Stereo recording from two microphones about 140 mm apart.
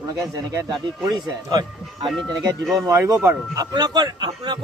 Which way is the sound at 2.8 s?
20° right (ahead or behind).